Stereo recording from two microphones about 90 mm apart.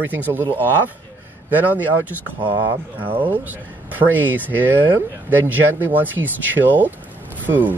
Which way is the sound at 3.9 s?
20° right (ahead or behind).